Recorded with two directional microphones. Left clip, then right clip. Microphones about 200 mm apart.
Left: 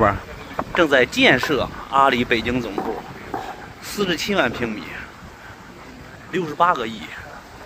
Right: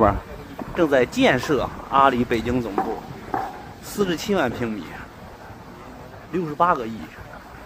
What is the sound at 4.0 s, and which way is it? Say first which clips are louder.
Speech: left 2 dB; 15° right (ahead or behind).